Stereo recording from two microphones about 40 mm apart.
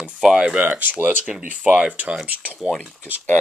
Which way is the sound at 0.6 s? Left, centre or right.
Right.